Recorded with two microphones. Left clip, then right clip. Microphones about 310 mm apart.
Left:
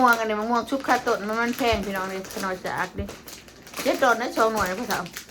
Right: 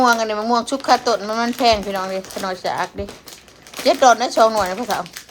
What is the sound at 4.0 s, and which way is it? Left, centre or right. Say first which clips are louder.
Speech: right 8 dB; centre.